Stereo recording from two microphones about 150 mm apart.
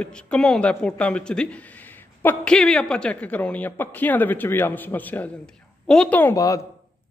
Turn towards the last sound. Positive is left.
turn(degrees=20)  # may be behind; listen again after turning